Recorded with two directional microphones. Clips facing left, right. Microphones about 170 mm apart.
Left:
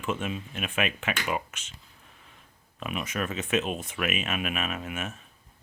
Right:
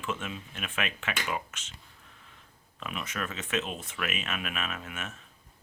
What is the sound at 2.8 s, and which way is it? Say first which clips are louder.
Speech: left 4 dB; 15° left (ahead or behind).